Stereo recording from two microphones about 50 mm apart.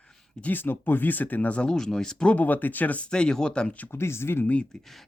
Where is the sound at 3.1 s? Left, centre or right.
Centre.